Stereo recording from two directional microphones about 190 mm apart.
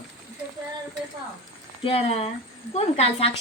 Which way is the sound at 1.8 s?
30° left (ahead or behind).